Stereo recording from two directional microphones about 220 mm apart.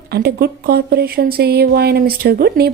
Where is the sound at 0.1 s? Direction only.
45° right (ahead or behind).